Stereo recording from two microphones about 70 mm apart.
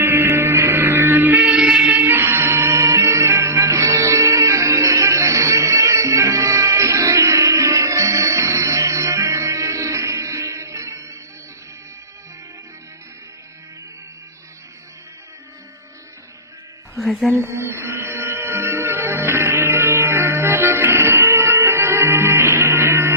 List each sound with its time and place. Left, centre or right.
0.0 s music: right
16.9 s a sound: centre
17.3 s music: right